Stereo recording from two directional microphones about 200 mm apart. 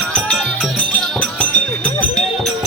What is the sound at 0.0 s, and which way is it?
Music, centre (ahead or behind).